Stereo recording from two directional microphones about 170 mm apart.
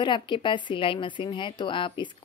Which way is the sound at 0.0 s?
30° left (ahead or behind).